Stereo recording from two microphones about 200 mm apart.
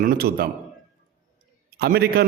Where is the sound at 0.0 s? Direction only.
50° right (ahead or behind).